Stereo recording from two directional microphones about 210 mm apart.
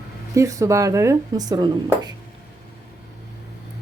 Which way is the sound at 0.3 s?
15° right (ahead or behind).